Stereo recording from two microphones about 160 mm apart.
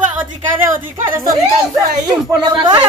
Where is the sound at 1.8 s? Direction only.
25° right (ahead or behind).